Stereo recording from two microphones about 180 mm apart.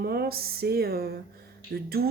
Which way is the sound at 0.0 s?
60° right (ahead or behind).